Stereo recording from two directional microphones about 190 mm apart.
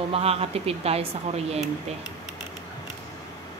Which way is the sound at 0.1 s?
30° right (ahead or behind).